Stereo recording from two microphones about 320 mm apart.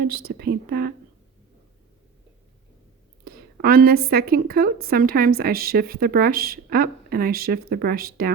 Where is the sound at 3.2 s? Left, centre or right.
Right.